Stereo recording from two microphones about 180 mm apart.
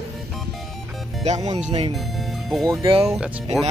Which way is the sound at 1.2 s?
40° right (ahead or behind).